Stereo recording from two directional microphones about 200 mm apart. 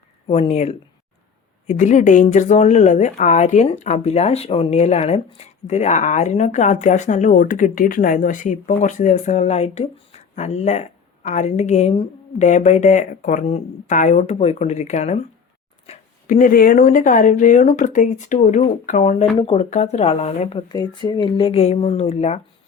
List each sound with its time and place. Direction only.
0.3 s speech: 30° left (ahead or behind)